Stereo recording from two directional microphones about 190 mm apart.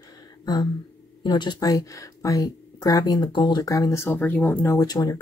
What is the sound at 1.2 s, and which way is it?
Speech, 25° left (ahead or behind).